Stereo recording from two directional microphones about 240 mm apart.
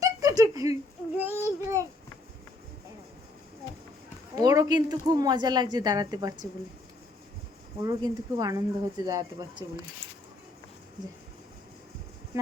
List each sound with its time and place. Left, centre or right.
0.0 s a sound: centre
4.4 s speech: centre
7.8 s speech: centre